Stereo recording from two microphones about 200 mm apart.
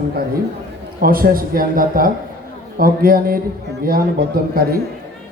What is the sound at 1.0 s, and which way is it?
A man's voice, 45° right (ahead or behind).